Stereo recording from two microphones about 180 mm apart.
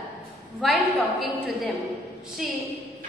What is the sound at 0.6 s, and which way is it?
Speech, centre (ahead or behind).